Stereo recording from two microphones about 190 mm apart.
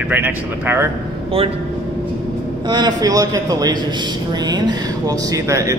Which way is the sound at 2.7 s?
20° right (ahead or behind).